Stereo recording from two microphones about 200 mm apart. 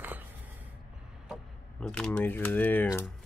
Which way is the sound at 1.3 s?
5° left (ahead or behind).